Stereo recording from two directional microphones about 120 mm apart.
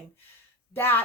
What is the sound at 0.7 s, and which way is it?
Speech, 20° left (ahead or behind).